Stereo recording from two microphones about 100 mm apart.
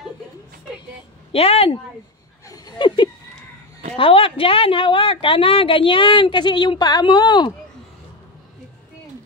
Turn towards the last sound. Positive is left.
turn(degrees=50)  # may be behind; listen again after turning